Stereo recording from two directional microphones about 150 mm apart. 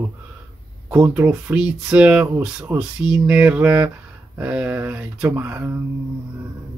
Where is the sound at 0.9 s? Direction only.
15° right (ahead or behind).